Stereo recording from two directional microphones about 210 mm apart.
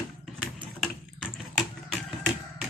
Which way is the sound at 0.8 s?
Centre (ahead or behind).